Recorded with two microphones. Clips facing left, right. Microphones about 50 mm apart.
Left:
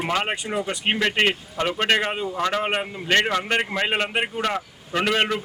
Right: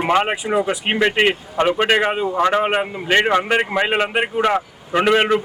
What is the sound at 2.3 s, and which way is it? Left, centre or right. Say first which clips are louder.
Speech: right 8 dB; right.